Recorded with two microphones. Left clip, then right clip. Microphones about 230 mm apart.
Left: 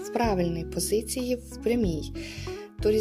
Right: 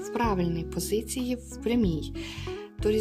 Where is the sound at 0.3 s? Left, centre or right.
Centre.